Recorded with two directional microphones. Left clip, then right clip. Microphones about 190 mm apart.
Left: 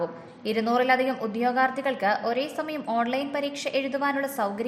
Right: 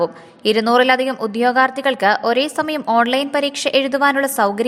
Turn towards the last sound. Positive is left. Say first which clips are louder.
# right 11 dB
turn(degrees=-35)  # may be behind; listen again after turning